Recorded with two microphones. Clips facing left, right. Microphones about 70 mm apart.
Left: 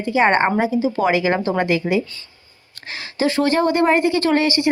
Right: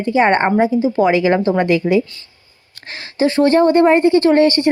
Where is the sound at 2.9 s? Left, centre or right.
Right.